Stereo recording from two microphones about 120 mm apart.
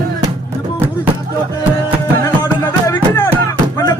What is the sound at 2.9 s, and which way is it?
Music, 15° left (ahead or behind).